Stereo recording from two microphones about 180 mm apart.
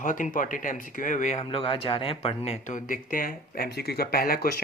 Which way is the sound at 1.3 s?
30° left (ahead or behind).